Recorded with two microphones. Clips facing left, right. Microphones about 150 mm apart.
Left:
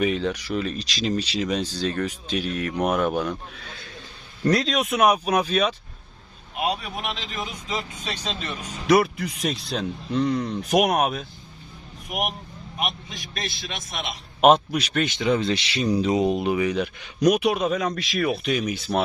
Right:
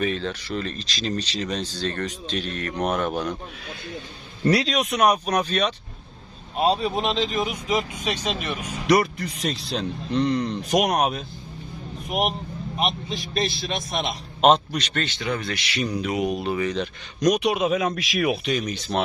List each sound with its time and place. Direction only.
0.0 s speech: 15° left (ahead or behind)
4.4 s speech: 5° right (ahead or behind)
6.6 s speech: 30° right (ahead or behind); by 8.7 s 10° right (ahead or behind)
8.9 s speech: centre (ahead or behind)
12.0 s a man's voice: 25° right (ahead or behind)
14.4 s speech: 5° left (ahead or behind); by 16.4 s 30° left (ahead or behind)
16.4 s speech: 10° left (ahead or behind); by 18.3 s 10° right (ahead or behind)
18.4 s speech: 5° left (ahead or behind)